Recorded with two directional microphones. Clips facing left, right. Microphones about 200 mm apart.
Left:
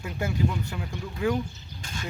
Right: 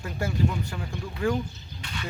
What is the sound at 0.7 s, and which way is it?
Speech, 5° left (ahead or behind).